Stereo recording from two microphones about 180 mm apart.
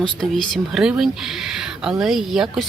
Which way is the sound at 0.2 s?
Centre (ahead or behind).